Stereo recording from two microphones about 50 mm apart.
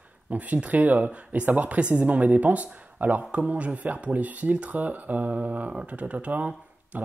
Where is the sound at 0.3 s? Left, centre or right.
Right.